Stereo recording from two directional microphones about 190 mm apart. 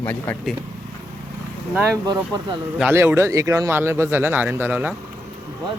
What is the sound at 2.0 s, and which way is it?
Speech, 20° right (ahead or behind).